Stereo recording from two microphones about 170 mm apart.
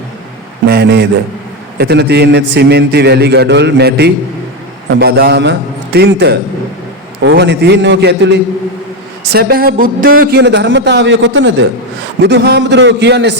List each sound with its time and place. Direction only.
0.6 s a sound: 70° right (ahead or behind)
1.8 s a man's voice: 75° right (ahead or behind)
7.3 s a man's voice: 90° right
9.3 s a man's voice: 65° right (ahead or behind); by 13.3 s 90° right